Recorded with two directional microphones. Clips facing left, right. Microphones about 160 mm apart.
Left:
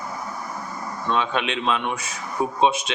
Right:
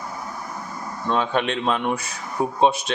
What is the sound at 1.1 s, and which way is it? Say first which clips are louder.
Speech: right 2 dB; 45° right (ahead or behind).